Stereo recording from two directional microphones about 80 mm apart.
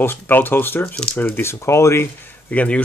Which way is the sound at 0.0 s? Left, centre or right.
Left.